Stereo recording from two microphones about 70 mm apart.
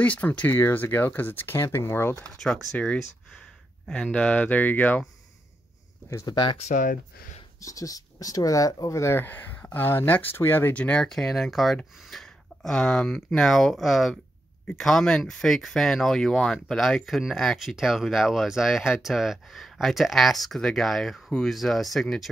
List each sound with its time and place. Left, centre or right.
0.0 s speech: left
2.4 s speech: centre
3.8 s speech: centre
7.6 s speech: left
9.2 s speech: left
10.7 s speech: centre